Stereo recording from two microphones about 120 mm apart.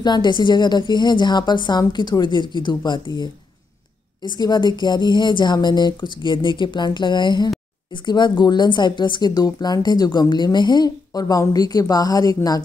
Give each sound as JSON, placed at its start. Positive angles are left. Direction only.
{"t": 0.0, "sound": "a woman's voice", "side_deg": 40}